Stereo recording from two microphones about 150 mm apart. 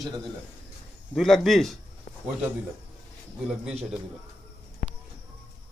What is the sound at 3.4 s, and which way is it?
Speech, 5° right (ahead or behind).